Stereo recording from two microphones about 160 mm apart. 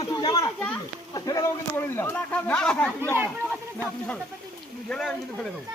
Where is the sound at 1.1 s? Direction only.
20° left (ahead or behind).